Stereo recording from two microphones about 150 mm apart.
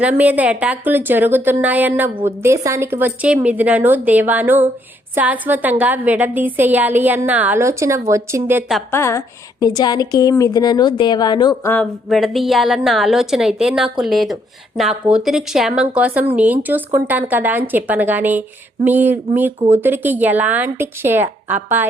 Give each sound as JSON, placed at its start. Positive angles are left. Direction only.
{"t": 0.0, "sound": "a woman's voice", "side_deg": -10}
{"t": 8.9, "sound": "a woman's voice", "side_deg": 15}
{"t": 11.7, "sound": "a woman's voice", "side_deg": 5}